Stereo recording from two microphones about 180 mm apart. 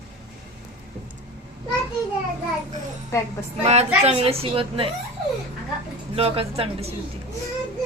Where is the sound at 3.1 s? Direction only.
15° left (ahead or behind).